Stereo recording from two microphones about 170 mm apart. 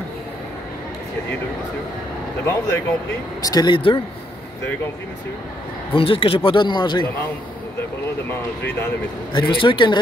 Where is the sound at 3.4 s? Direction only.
25° left (ahead or behind).